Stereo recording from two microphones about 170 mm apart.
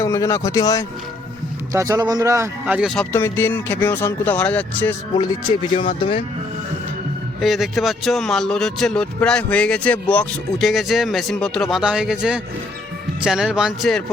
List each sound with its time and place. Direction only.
0.0 s speech: 15° left (ahead or behind)
1.7 s speech: 20° right (ahead or behind); by 3.1 s centre (ahead or behind)
3.1 s speech: 15° left (ahead or behind)
5.1 s speech: 25° left (ahead or behind)
7.4 s speech: centre (ahead or behind)